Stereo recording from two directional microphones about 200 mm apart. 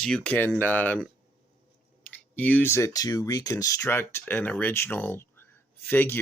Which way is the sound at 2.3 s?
10° left (ahead or behind).